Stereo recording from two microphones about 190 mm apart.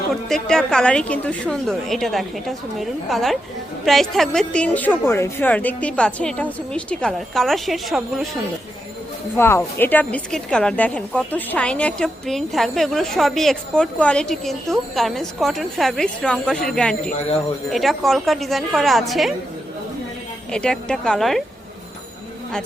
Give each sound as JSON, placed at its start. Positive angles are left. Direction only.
{"t": 0.1, "sound": "a woman's voice", "side_deg": 5}
{"t": 9.3, "sound": "a woman's voice", "side_deg": 10}
{"t": 17.1, "sound": "speech", "side_deg": 40}
{"t": 17.7, "sound": "a woman's voice", "side_deg": 0}
{"t": 20.5, "sound": "a woman's voice", "side_deg": 5}